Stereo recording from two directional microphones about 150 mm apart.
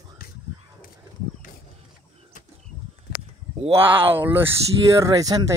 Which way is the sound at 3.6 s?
40° right (ahead or behind).